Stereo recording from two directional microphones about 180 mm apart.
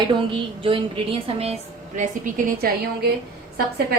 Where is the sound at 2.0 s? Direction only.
45° right (ahead or behind).